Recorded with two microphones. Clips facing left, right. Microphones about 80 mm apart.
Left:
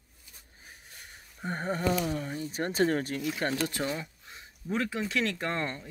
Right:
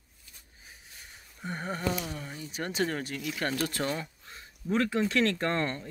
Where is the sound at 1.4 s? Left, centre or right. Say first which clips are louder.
Left 3 dB; left.